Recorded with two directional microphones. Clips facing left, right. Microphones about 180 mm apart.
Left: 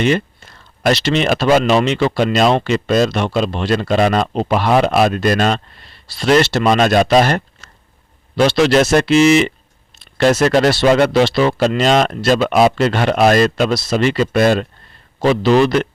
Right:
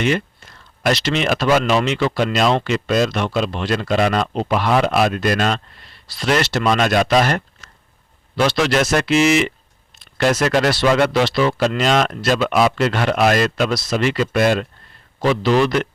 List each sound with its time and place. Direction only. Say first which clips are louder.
0.0 s speech: left 4 dB; 30° left (ahead or behind)